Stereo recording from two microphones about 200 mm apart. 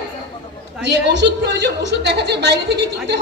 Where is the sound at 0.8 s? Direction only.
60° right (ahead or behind).